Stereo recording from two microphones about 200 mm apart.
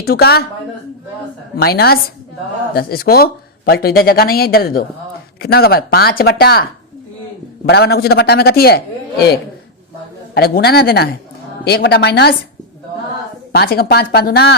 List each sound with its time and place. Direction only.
0.0 s speech: 50° left (ahead or behind)
1.6 s speech: 50° left (ahead or behind)
7.7 s speech: 55° left (ahead or behind)
13.5 s speech: 50° left (ahead or behind)